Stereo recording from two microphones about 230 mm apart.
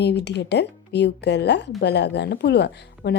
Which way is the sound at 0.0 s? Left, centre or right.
Left.